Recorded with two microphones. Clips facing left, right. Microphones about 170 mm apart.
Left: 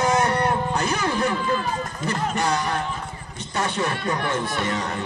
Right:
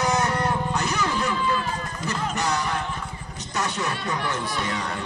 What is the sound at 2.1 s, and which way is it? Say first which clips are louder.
Speech: left 3 dB; 30° left (ahead or behind).